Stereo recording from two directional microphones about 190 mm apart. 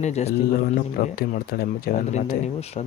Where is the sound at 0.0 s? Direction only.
35° left (ahead or behind).